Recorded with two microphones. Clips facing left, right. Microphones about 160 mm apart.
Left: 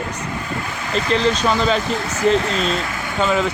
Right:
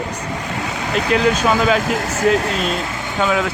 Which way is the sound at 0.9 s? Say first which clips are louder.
Right 1 dB; 10° right (ahead or behind).